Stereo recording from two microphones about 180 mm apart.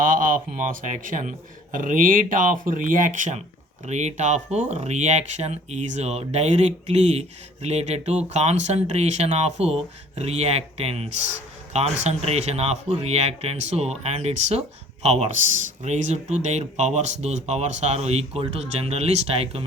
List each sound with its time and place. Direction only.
0.0 s a man's voice: 50° right (ahead or behind)